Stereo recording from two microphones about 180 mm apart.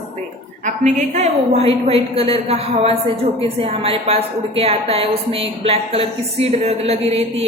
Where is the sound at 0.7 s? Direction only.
40° right (ahead or behind).